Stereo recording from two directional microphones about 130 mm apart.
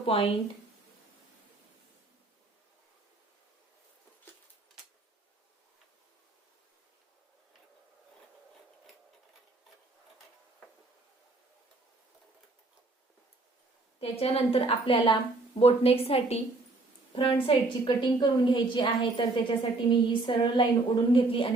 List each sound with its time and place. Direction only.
0.0 s speech: 45° left (ahead or behind)
14.0 s a woman's voice: 50° left (ahead or behind)